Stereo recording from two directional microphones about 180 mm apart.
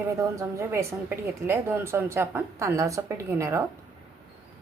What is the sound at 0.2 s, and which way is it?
A woman's voice, 15° right (ahead or behind).